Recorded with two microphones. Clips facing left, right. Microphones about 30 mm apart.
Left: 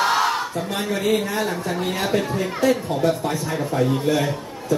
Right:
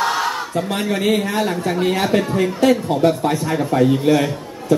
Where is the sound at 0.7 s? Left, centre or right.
Right.